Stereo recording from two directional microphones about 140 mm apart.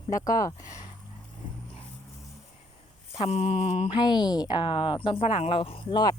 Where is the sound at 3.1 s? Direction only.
45° left (ahead or behind).